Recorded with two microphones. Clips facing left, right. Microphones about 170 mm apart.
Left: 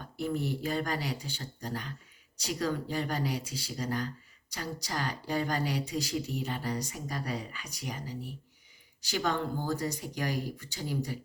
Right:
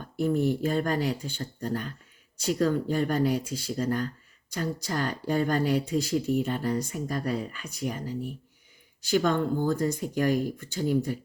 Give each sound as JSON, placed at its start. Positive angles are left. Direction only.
{"t": 0.2, "sound": "speech", "side_deg": -50}